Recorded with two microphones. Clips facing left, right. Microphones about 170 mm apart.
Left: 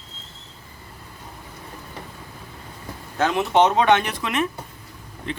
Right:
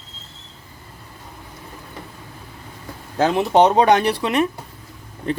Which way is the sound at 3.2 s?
35° right (ahead or behind).